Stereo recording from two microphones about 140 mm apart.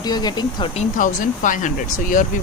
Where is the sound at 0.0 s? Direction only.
30° left (ahead or behind).